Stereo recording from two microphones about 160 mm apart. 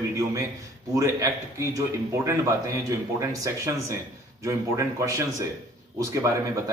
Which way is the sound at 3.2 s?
20° right (ahead or behind).